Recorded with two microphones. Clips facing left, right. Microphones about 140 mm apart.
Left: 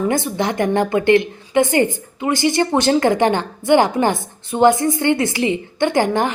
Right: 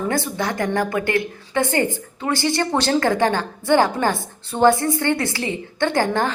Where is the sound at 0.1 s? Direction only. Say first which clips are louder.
Left 3 dB; 20° left (ahead or behind).